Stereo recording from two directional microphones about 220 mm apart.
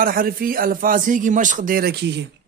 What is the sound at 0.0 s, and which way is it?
A man's voice, 40° right (ahead or behind).